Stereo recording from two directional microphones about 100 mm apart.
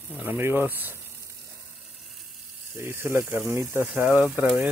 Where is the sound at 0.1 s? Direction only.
20° right (ahead or behind).